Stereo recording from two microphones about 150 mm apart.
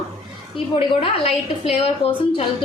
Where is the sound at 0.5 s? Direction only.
40° left (ahead or behind).